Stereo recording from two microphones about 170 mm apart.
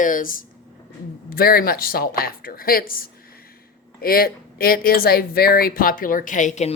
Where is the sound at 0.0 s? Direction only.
55° left (ahead or behind).